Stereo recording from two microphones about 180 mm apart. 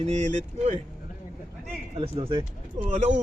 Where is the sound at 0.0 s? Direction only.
40° right (ahead or behind).